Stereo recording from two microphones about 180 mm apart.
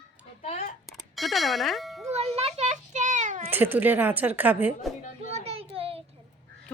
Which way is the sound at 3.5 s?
10° right (ahead or behind).